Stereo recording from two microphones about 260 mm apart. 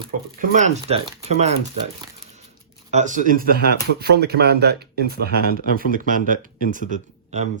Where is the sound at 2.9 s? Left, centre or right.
Right.